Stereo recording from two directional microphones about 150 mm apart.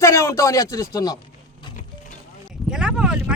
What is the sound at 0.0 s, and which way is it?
Speech, 20° left (ahead or behind).